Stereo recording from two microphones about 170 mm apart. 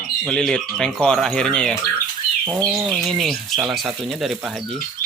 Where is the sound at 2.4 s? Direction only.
10° right (ahead or behind).